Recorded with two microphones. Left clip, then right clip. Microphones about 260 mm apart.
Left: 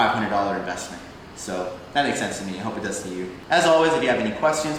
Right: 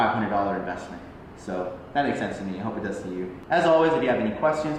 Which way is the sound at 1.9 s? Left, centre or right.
Centre.